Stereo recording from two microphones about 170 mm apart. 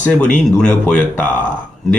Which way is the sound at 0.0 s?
5° left (ahead or behind).